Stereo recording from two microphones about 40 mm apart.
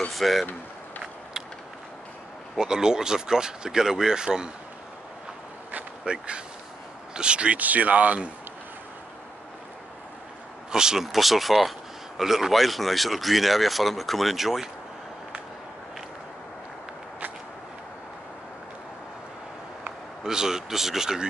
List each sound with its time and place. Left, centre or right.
0.1 s speech: centre
2.6 s speech: centre
6.1 s speech: right
7.6 s speech: right
10.7 s speech: centre
11.1 s speech: centre
20.2 s speech: centre